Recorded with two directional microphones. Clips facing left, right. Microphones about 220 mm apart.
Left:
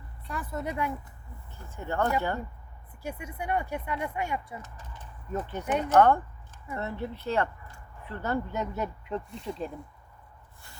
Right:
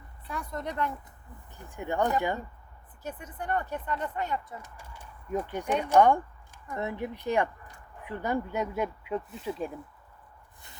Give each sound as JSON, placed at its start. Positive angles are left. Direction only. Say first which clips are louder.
{"t": 0.3, "sound": "speech", "louder": "left 1 dB", "side_deg": 5}
{"t": 1.5, "sound": "speech", "louder": "right 1 dB", "side_deg": -15}
{"t": 3.0, "sound": "speech", "louder": "left 2 dB", "side_deg": 10}
{"t": 4.6, "sound": "speech", "louder": "left 1 dB", "side_deg": -10}